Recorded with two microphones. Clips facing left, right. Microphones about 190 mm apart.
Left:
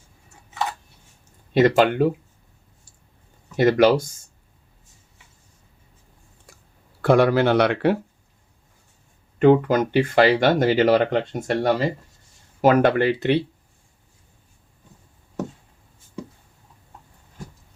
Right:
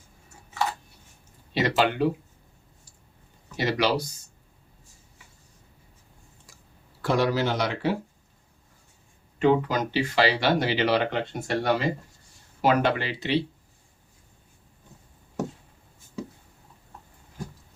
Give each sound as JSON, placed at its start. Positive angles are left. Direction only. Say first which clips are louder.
{"t": 1.5, "sound": "speech", "louder": "left 7 dB", "side_deg": 50}
{"t": 3.6, "sound": "speech", "louder": "left 9 dB", "side_deg": 50}
{"t": 7.0, "sound": "speech", "louder": "left 7 dB", "side_deg": 55}
{"t": 9.4, "sound": "speech", "louder": "left 6 dB", "side_deg": 50}